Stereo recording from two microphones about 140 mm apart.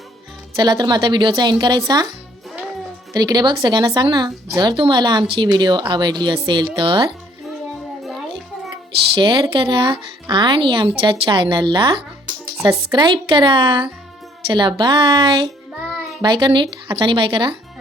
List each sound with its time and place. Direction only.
0.5 s a woman's voice: 30° right (ahead or behind)
3.1 s a woman's voice: 30° right (ahead or behind)
9.2 s a woman's voice: 35° right (ahead or behind)